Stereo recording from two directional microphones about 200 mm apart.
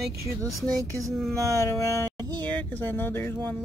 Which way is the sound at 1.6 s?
15° left (ahead or behind).